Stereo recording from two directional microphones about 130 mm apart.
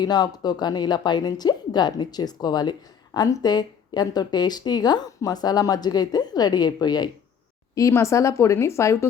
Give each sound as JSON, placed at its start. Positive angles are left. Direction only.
{"t": 0.0, "sound": "a woman's voice", "side_deg": 30}